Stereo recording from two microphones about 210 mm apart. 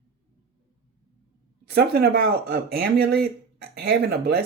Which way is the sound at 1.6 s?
50° right (ahead or behind).